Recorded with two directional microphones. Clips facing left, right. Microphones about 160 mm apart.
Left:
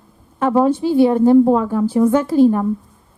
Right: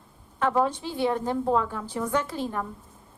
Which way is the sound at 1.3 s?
35° left (ahead or behind).